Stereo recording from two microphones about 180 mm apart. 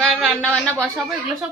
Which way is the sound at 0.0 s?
Centre (ahead or behind).